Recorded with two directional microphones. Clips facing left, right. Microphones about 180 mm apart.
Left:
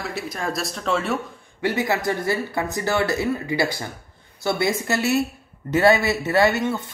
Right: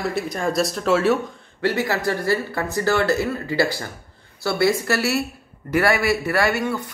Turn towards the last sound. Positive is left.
turn(degrees=20)  # may be behind; listen again after turning